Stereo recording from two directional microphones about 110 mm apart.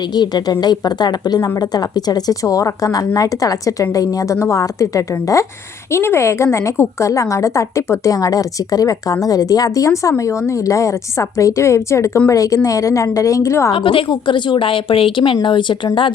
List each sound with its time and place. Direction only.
0.2 s a woman's voice: 40° left (ahead or behind)
13.7 s a woman's voice: 55° left (ahead or behind)